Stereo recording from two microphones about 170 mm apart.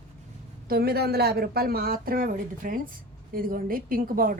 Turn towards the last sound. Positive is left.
turn(degrees=-55)  # may be behind; listen again after turning